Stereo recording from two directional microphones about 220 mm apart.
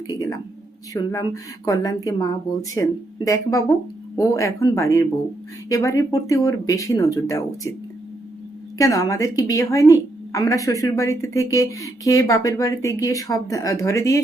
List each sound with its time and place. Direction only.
0.1 s a sound: 15° left (ahead or behind)
1.1 s a woman's voice: 15° left (ahead or behind)
8.8 s a woman's voice: 15° left (ahead or behind)